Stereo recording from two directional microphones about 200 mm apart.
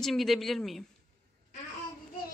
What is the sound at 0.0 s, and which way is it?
Speech, centre (ahead or behind).